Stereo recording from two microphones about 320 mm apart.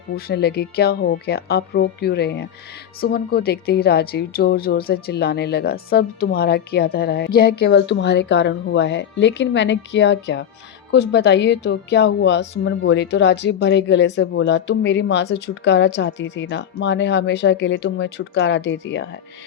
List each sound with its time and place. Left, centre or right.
0.3 s speech: left